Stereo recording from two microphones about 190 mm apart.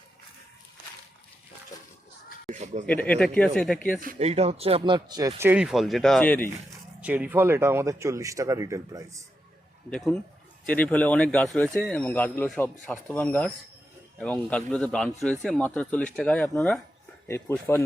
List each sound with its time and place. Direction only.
2.5 s a sound: 40° right (ahead or behind)
2.8 s speech: 10° left (ahead or behind)
4.0 s speech: 40° right (ahead or behind); by 5.3 s 20° right (ahead or behind)
5.4 s speech: 10° right (ahead or behind); by 6.5 s 10° left (ahead or behind)
7.0 s speech: 10° right (ahead or behind)
9.9 s speech: 5° left (ahead or behind)